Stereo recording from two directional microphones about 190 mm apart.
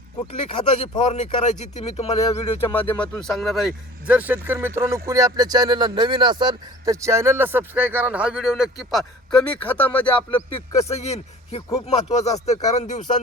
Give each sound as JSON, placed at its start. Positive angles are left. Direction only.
{"t": 0.3, "sound": "speech", "side_deg": 35}
{"t": 2.9, "sound": "speech", "side_deg": 5}
{"t": 10.2, "sound": "speech", "side_deg": 30}